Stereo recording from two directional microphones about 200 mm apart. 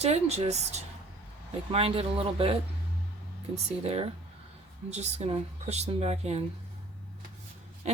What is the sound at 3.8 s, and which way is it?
Speech, 30° right (ahead or behind).